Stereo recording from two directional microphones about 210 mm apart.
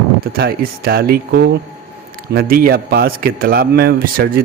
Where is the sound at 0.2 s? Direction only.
45° right (ahead or behind).